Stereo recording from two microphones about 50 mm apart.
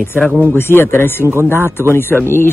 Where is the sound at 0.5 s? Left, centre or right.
Left.